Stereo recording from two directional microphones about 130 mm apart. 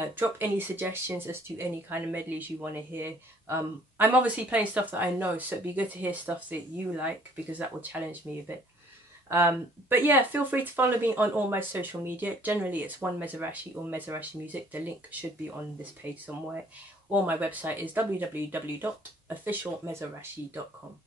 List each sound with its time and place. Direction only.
0.0 s speech: 15° right (ahead or behind)
17.1 s speech: 15° right (ahead or behind)